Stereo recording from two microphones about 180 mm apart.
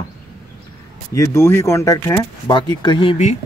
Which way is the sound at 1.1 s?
15° left (ahead or behind).